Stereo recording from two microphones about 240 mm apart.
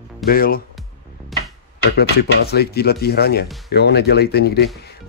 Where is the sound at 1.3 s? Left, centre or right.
Centre.